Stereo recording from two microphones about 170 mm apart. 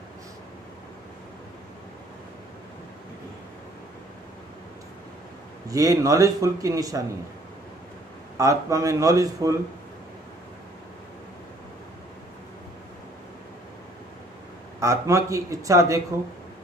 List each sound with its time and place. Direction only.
5.7 s a man's voice: 20° right (ahead or behind)
8.4 s a man's voice: 20° right (ahead or behind)
14.8 s a man's voice: 20° right (ahead or behind)